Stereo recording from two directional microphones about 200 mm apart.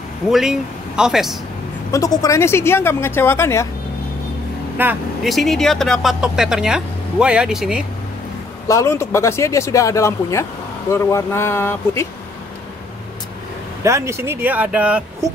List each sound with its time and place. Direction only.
0.3 s speech: centre (ahead or behind)
1.9 s speech: 15° left (ahead or behind)
4.7 s speech: 5° right (ahead or behind)
8.6 s speech: 15° left (ahead or behind)
13.8 s speech: 15° right (ahead or behind)